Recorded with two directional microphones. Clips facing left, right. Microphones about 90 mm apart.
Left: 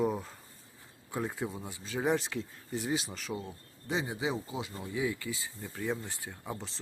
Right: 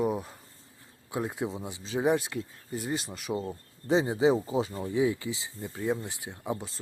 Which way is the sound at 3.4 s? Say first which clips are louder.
Right 7 dB; 35° right (ahead or behind).